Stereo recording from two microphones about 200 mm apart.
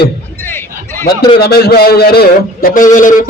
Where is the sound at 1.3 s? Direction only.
55° left (ahead or behind).